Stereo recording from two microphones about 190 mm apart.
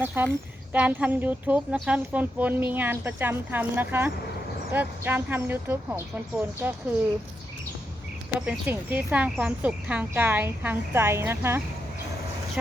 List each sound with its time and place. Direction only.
0.0 s speech: 10° right (ahead or behind)
8.4 s speech: 10° right (ahead or behind)